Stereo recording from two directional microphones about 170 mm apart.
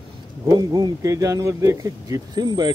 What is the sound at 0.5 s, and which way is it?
Speech, 25° right (ahead or behind).